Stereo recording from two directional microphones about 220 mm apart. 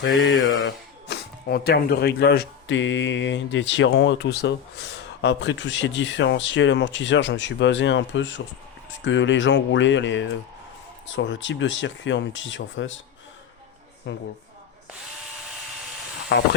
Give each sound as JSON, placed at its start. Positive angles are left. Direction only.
{"t": 0.0, "sound": "speech", "side_deg": 55}
{"t": 14.1, "sound": "a woman's voice", "side_deg": 55}
{"t": 16.3, "sound": "a woman's voice", "side_deg": 55}